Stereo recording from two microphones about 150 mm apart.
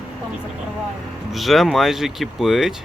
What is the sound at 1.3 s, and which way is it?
Speech, centre (ahead or behind).